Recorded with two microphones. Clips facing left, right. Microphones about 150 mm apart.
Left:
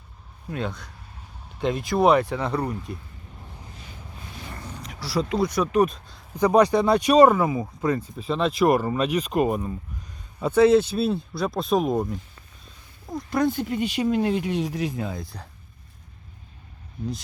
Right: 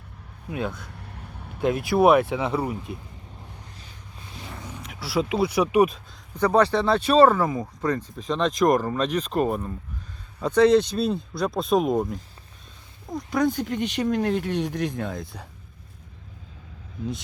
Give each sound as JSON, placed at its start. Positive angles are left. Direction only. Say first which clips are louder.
{"t": 0.5, "sound": "speech", "louder": "right 1 dB", "side_deg": -5}
{"t": 0.9, "sound": "vehicle", "louder": "right 5 dB", "side_deg": -65}
{"t": 1.5, "sound": "speech", "louder": "right 2 dB", "side_deg": -5}
{"t": 4.4, "sound": "speech", "louder": "right 1 dB", "side_deg": 0}
{"t": 6.3, "sound": "speech", "louder": "left 2 dB", "side_deg": 15}